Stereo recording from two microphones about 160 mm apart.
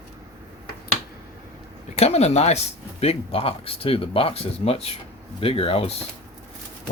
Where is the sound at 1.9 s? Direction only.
40° left (ahead or behind).